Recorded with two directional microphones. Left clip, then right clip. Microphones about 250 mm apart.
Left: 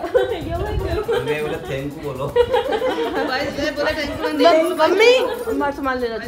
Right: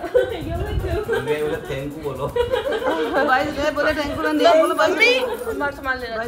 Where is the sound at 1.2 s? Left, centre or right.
Centre.